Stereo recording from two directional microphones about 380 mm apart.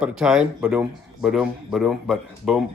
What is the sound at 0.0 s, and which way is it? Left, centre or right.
A man's voice, centre.